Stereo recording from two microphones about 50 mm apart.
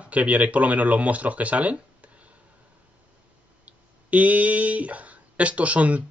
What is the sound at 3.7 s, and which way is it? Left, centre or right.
Speech, right.